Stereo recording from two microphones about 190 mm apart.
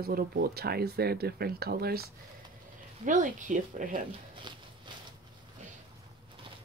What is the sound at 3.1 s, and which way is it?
Speech, 40° right (ahead or behind).